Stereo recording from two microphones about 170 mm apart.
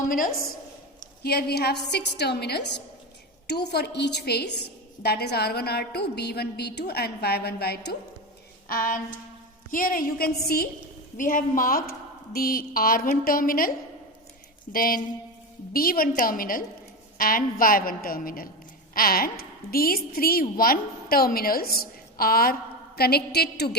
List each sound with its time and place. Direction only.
0.1 s a woman's voice: 55° left (ahead or behind)
1.2 s a woman's voice: 70° left (ahead or behind); by 2.8 s 85° left
3.4 s a woman's voice: 75° left (ahead or behind)
8.7 s a woman's voice: 55° left (ahead or behind)
11.2 s a woman's voice: 55° left (ahead or behind); by 23.7 s 70° left (ahead or behind)